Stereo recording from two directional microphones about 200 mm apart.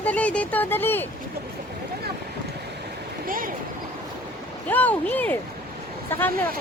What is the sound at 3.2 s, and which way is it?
Vehicle, 45° right (ahead or behind).